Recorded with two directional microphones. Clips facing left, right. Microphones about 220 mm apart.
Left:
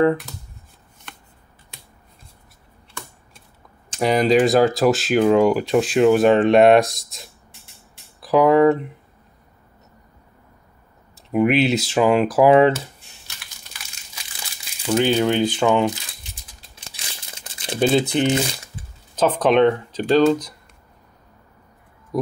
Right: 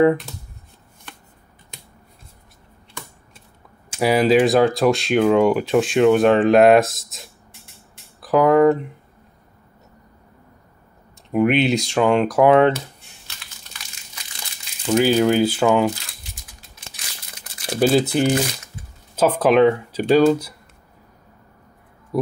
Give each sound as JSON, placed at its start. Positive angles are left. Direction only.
{"t": 3.9, "sound": "speech", "side_deg": -5}
{"t": 11.2, "sound": "speech", "side_deg": 0}
{"t": 14.9, "sound": "speech", "side_deg": -5}
{"t": 16.9, "sound": "crumpling", "side_deg": 25}
{"t": 17.7, "sound": "speech", "side_deg": -5}
{"t": 22.1, "sound": "speech", "side_deg": -5}